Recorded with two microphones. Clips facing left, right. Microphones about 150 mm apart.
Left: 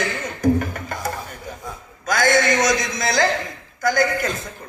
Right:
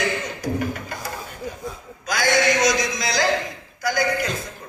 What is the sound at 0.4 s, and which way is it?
Music, 50° left (ahead or behind).